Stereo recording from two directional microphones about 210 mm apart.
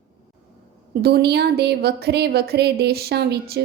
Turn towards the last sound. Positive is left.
turn(degrees=-50)  # may be behind; listen again after turning